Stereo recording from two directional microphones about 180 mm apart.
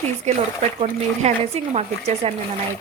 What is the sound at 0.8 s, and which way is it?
A woman's voice, 35° right (ahead or behind).